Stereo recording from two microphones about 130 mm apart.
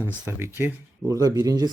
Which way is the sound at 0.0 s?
20° right (ahead or behind).